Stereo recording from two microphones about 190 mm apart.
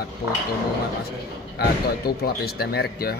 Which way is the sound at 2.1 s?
55° left (ahead or behind).